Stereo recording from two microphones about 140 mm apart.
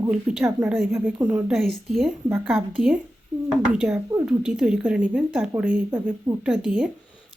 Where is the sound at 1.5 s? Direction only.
Centre (ahead or behind).